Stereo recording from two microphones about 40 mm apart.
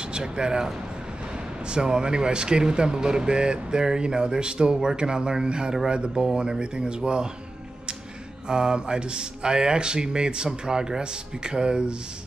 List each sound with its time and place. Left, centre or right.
0.1 s speech: centre
8.5 s speech: centre